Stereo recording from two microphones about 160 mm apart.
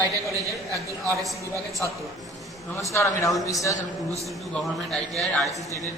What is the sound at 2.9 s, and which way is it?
Speech, 20° left (ahead or behind).